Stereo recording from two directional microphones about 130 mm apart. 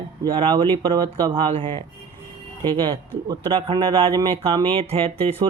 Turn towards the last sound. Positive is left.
turn(degrees=-45)  # may be behind; listen again after turning